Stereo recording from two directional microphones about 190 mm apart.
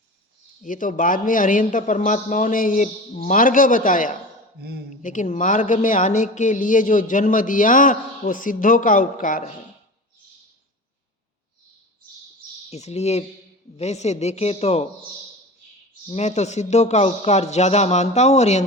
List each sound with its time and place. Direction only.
0.6 s a man's voice: 45° left (ahead or behind)
12.7 s a man's voice: 35° left (ahead or behind)
16.0 s a man's voice: 35° left (ahead or behind)